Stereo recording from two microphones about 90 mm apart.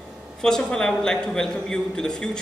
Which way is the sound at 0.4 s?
5° left (ahead or behind).